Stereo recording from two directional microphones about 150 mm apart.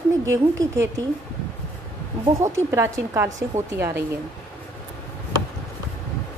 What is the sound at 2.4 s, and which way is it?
A woman's voice, 20° right (ahead or behind).